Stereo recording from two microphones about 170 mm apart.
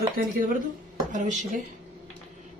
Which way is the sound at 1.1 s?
45° right (ahead or behind).